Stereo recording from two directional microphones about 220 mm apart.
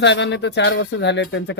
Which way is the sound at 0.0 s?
50° left (ahead or behind).